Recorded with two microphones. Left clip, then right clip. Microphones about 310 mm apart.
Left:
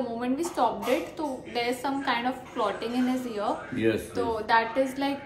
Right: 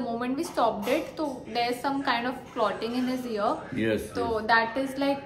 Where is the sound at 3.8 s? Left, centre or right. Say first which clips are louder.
Left 3 dB; centre.